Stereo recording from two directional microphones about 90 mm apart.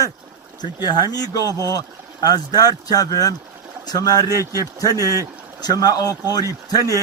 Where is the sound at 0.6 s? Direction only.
50° left (ahead or behind).